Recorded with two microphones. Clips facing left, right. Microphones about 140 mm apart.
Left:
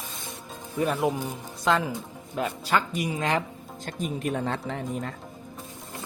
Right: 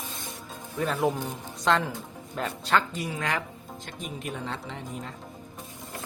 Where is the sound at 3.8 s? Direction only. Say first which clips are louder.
Left 7 dB; 50° left (ahead or behind).